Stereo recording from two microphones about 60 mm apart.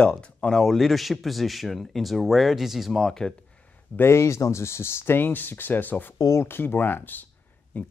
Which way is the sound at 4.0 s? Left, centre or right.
Left.